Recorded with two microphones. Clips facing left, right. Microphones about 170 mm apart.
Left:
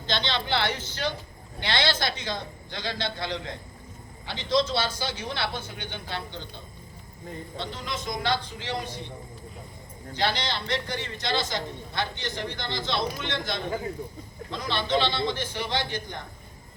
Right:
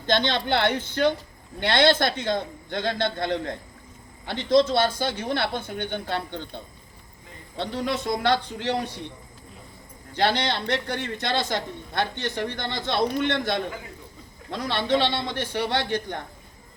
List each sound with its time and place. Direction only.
0.0 s a man's voice: 50° right (ahead or behind)
7.5 s a man's voice: 60° right (ahead or behind)
10.2 s a man's voice: 60° right (ahead or behind)